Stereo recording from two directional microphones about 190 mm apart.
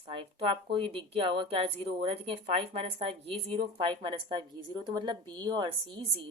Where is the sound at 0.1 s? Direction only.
30° right (ahead or behind).